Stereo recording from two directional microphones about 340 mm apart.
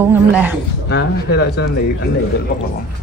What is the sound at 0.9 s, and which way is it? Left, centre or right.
Speech, left.